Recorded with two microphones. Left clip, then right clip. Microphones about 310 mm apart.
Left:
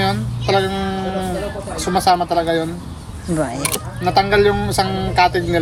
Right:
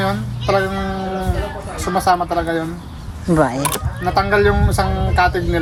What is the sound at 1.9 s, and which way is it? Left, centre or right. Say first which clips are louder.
Speech: left 1 dB; centre.